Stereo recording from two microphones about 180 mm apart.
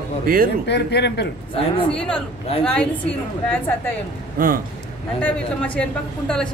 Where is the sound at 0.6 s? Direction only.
70° left (ahead or behind).